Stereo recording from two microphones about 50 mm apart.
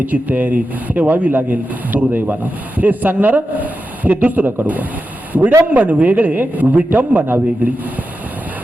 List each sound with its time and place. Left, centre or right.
0.0 s speech: right